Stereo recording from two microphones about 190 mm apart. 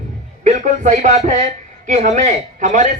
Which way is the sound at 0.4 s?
40° right (ahead or behind).